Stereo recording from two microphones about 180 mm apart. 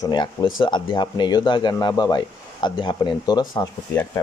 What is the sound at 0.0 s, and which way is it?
Speech, 25° left (ahead or behind).